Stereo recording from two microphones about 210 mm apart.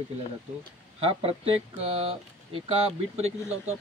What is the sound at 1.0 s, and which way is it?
Speech, 25° right (ahead or behind).